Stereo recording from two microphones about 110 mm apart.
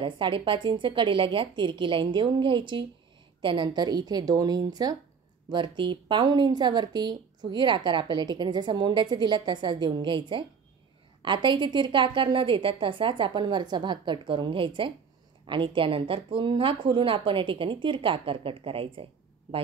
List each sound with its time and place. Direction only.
0.0 s a woman's voice: 50° right (ahead or behind)